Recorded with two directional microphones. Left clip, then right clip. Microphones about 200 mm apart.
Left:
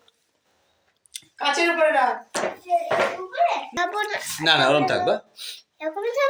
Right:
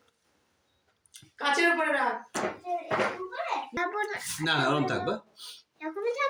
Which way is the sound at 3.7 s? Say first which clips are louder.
Left 6 dB; 20° right (ahead or behind).